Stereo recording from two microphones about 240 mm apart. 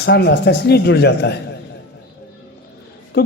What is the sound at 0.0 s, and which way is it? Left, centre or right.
Speech, left.